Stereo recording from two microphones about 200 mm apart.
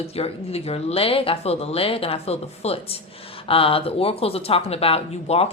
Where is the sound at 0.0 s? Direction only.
30° left (ahead or behind).